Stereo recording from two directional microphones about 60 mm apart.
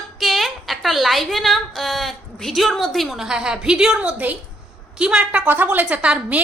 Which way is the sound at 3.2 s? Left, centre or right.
Centre.